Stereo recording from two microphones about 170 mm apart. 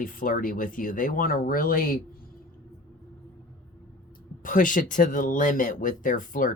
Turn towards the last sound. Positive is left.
turn(degrees=50)  # may be behind; listen again after turning